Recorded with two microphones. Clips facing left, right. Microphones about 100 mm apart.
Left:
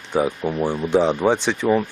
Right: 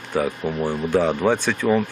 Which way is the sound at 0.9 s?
20° left (ahead or behind).